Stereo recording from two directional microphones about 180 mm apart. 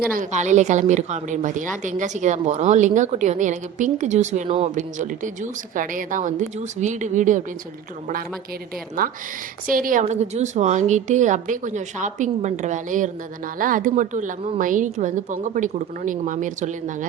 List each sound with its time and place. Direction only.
0.1 s a woman's voice: 45° right (ahead or behind)
9.0 s a woman's voice: 55° right (ahead or behind)